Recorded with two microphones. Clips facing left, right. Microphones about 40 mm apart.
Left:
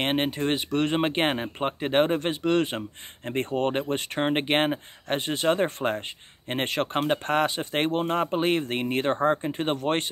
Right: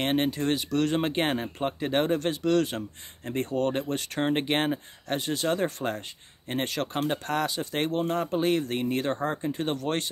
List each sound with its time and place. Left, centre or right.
0.0 s speech: left